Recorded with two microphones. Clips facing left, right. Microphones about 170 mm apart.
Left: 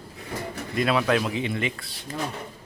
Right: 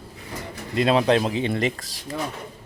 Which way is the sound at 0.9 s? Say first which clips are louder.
Right 4 dB; 30° right (ahead or behind).